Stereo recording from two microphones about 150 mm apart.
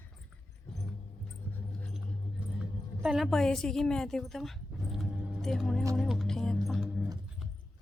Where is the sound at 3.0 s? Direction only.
Centre (ahead or behind).